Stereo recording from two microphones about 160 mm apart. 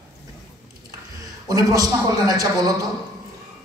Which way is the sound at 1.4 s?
20° right (ahead or behind).